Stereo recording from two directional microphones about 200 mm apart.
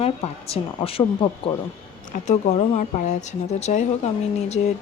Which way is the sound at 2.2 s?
35° left (ahead or behind).